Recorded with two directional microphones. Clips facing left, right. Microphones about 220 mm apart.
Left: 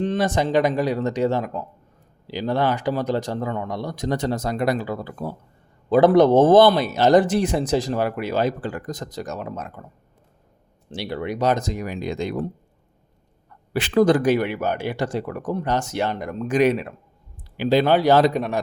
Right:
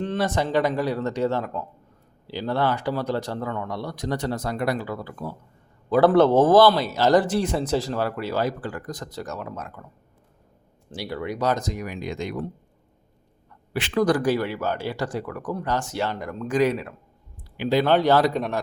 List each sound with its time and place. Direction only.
0.0 s speech: 20° left (ahead or behind)
10.9 s speech: 25° left (ahead or behind)
13.7 s speech: 40° left (ahead or behind)
14.0 s speech: 25° left (ahead or behind)
17.6 s speech: 35° left (ahead or behind)
17.8 s speech: 10° left (ahead or behind)